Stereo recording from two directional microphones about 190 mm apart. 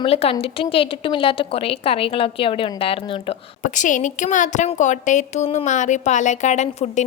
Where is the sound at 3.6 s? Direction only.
40° left (ahead or behind).